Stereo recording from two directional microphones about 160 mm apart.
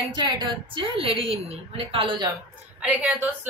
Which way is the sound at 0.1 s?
30° right (ahead or behind).